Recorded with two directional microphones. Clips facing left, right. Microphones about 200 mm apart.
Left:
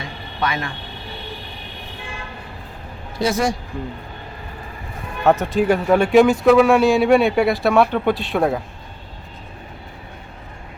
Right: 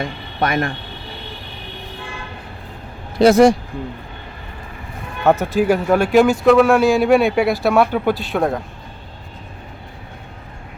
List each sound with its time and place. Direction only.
0.0 s speech: 50° right (ahead or behind)
3.2 s speech: 65° right (ahead or behind)
5.2 s speech: 5° right (ahead or behind)